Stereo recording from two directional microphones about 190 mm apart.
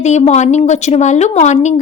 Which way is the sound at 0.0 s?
40° left (ahead or behind).